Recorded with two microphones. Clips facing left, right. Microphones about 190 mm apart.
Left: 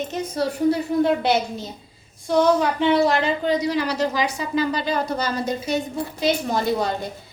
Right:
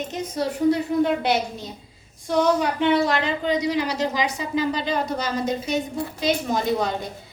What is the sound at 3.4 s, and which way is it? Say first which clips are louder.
Speech: left 1 dB; 15° right (ahead or behind).